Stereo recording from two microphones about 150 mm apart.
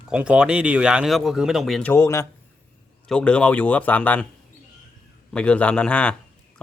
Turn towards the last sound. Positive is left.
turn(degrees=5)  # may be behind; listen again after turning